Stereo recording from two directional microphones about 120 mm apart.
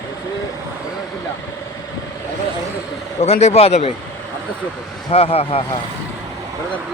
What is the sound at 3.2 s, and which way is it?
Speech, 65° left (ahead or behind).